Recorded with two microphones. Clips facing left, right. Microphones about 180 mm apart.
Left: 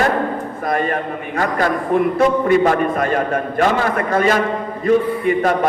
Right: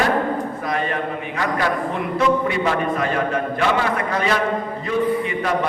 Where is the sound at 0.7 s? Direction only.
50° left (ahead or behind).